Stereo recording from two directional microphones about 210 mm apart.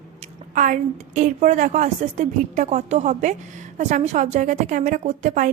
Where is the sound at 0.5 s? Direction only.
40° right (ahead or behind).